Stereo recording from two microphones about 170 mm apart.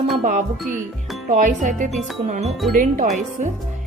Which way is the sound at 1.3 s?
45° right (ahead or behind).